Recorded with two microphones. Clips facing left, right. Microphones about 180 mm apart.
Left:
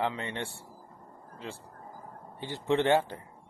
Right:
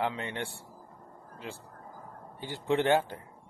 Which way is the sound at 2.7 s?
20° left (ahead or behind).